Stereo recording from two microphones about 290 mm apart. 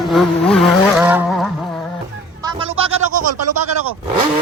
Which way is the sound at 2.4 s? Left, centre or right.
Centre.